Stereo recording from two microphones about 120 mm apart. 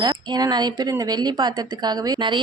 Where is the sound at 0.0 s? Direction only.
35° right (ahead or behind).